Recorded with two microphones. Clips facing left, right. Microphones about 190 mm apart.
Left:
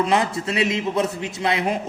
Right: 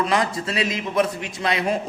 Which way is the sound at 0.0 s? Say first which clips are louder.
Left 2 dB; 25° left (ahead or behind).